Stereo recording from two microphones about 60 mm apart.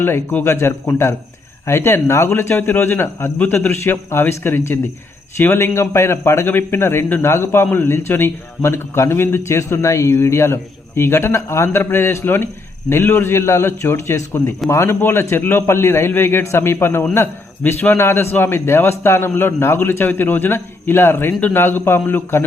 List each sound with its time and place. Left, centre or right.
0.0 s a man's voice: left